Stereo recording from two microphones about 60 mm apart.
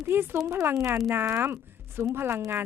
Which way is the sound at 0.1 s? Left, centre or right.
Right.